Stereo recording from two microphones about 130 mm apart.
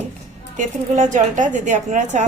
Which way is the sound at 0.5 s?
75° right (ahead or behind).